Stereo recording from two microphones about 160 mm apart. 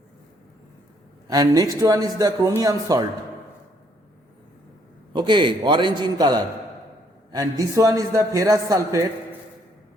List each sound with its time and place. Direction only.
1.3 s a man's voice: 25° right (ahead or behind)
5.1 s a man's voice: 30° right (ahead or behind)